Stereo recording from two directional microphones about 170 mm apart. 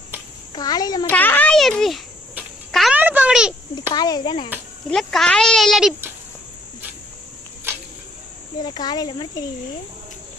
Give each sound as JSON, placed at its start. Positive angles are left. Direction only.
{"t": 0.5, "sound": "speech", "side_deg": 25}
{"t": 1.1, "sound": "a child's voice", "side_deg": 10}
{"t": 2.3, "sound": "a sound", "side_deg": -5}
{"t": 3.9, "sound": "speech", "side_deg": 25}
{"t": 4.9, "sound": "speech", "side_deg": 0}
{"t": 7.7, "sound": "a sound", "side_deg": -15}
{"t": 8.6, "sound": "speech", "side_deg": 25}